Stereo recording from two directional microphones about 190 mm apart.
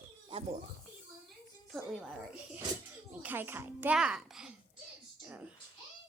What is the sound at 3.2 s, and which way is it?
A child's voice, 10° right (ahead or behind).